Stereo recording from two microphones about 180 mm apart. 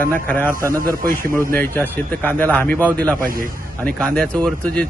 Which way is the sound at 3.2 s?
50° right (ahead or behind).